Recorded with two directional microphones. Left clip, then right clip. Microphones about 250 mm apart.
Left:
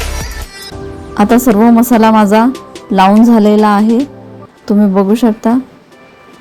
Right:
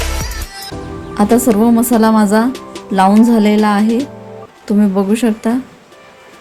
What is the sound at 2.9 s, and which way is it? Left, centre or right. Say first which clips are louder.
Speech: left 3 dB; centre.